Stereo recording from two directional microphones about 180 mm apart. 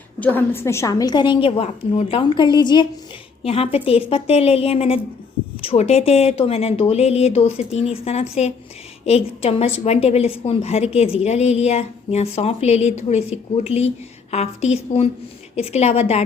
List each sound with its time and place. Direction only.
0.2 s a woman's voice: 10° left (ahead or behind); by 16.2 s 35° left (ahead or behind)